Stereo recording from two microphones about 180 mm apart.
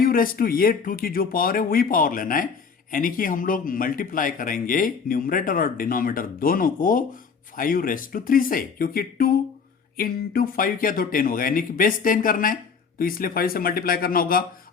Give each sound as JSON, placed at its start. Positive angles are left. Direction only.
{"t": 0.0, "sound": "speech", "side_deg": 50}